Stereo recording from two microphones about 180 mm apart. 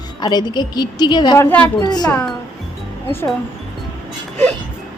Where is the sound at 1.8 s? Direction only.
25° left (ahead or behind).